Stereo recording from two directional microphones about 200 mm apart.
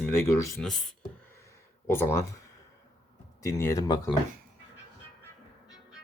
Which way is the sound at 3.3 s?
15° left (ahead or behind).